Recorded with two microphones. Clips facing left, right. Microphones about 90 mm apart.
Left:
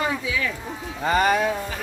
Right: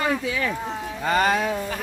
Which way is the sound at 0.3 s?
40° right (ahead or behind).